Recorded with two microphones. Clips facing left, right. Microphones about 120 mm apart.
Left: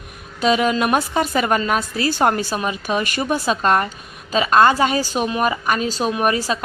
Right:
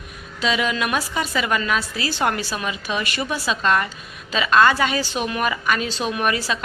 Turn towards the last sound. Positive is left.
turn(degrees=40)  # may be behind; listen again after turning